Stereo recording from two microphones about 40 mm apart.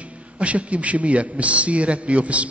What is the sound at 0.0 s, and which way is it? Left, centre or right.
A man's voice, right.